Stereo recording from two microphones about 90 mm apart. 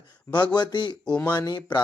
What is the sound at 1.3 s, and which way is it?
Speech, 50° left (ahead or behind).